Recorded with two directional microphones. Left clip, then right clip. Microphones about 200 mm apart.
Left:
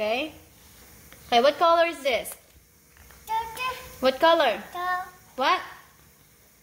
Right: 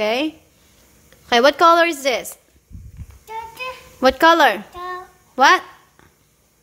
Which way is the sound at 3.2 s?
5° left (ahead or behind).